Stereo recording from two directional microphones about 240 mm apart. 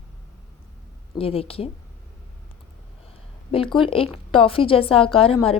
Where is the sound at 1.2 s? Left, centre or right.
Left.